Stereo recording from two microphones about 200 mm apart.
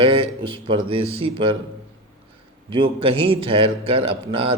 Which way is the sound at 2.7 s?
25° right (ahead or behind).